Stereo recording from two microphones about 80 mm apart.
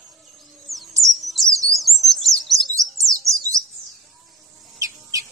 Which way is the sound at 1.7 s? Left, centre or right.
Centre.